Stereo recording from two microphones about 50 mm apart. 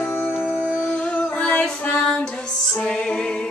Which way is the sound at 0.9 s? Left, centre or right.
Left.